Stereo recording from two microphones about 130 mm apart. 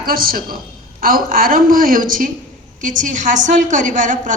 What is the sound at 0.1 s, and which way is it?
A woman's voice, 90° right.